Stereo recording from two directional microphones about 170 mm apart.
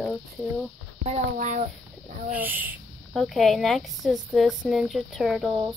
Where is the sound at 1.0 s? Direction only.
50° right (ahead or behind).